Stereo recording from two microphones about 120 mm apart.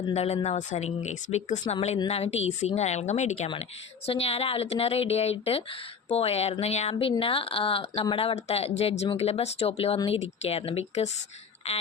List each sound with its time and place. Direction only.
0.1 s speech: 60° left (ahead or behind)
0.4 s a woman's voice: 80° left
1.6 s a woman's voice: 60° left (ahead or behind)
3.5 s speech: 55° left (ahead or behind)